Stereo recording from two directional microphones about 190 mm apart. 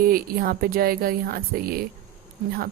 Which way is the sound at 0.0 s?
50° right (ahead or behind).